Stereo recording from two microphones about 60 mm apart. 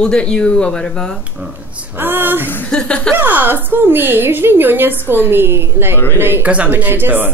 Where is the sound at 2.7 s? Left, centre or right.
Centre.